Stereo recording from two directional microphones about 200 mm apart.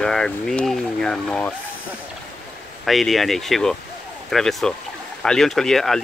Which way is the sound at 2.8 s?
Centre (ahead or behind).